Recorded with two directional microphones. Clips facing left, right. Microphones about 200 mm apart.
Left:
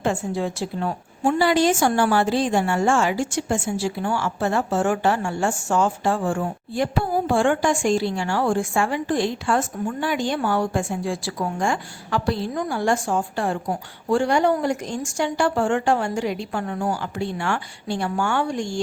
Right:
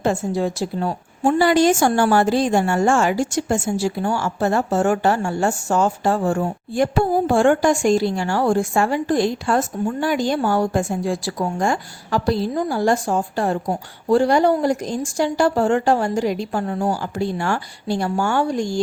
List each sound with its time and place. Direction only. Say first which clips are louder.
0.0 s a woman's voice: right 3 dB; 40° right (ahead or behind)